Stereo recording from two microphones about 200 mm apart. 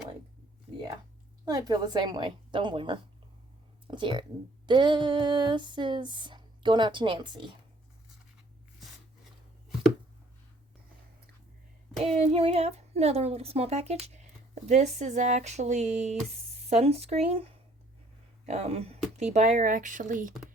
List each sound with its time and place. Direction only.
1.5 s speech: 20° right (ahead or behind)
11.9 s child singing: centre (ahead or behind)
12.2 s speech: 30° right (ahead or behind)